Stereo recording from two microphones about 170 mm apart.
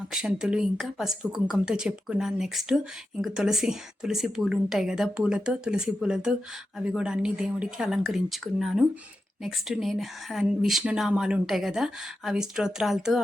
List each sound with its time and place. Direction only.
0.1 s speech: 5° right (ahead or behind)